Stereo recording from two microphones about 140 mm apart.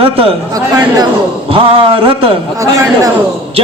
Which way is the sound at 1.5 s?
40° right (ahead or behind).